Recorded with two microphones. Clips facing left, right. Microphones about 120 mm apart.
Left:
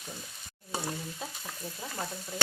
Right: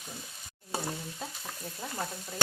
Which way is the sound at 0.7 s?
Centre (ahead or behind).